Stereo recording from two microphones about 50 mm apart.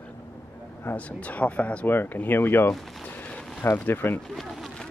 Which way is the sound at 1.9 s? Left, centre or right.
Left.